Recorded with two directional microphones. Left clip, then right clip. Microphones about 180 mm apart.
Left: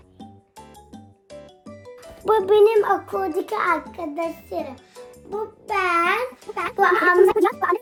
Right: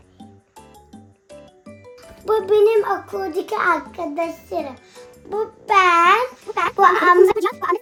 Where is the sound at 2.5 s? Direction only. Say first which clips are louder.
Right 1 dB; 60° left (ahead or behind).